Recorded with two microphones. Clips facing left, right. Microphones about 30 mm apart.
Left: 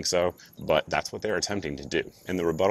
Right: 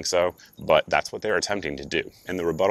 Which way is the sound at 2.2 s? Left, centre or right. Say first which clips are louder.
Right 2 dB; centre.